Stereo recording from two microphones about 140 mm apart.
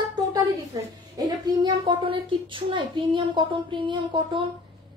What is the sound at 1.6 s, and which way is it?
A child's voice, 35° right (ahead or behind).